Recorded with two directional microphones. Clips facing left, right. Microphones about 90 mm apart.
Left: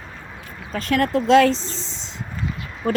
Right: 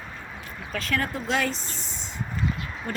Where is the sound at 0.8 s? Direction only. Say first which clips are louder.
Left 10 dB; 65° left (ahead or behind).